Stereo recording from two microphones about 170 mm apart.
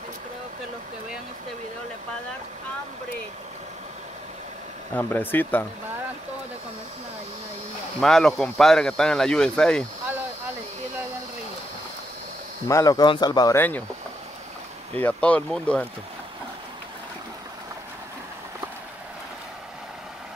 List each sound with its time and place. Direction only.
4.9 s speech: 10° left (ahead or behind)
8.0 s speech: centre (ahead or behind)
12.6 s speech: 20° left (ahead or behind)
13.6 s speech: 10° left (ahead or behind)
15.0 s speech: 10° left (ahead or behind)